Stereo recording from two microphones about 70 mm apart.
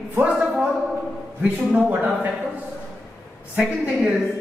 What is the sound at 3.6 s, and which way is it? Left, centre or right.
Speech, centre.